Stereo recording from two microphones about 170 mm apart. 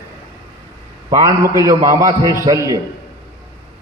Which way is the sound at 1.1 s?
20° right (ahead or behind).